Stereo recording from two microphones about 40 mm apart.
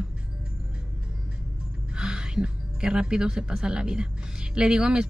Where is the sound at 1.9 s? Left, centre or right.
Right.